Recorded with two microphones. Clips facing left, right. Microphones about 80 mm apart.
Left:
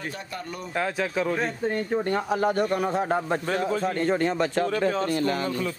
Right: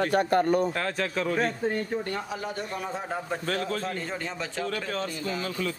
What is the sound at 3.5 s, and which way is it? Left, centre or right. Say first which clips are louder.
Speech: left 3 dB; centre.